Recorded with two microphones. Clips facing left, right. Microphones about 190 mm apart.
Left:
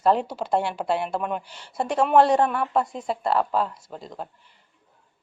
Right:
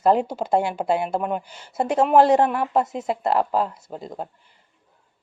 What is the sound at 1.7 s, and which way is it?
Speech, 20° right (ahead or behind).